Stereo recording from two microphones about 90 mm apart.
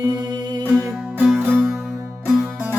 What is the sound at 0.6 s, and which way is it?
Music, 20° right (ahead or behind).